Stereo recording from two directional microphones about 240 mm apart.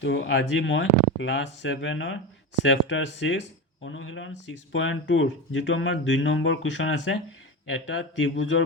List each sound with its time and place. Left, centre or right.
0.0 s speech: left